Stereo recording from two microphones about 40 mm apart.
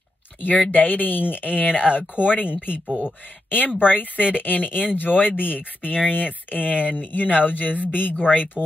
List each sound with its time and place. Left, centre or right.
0.7 s speech: left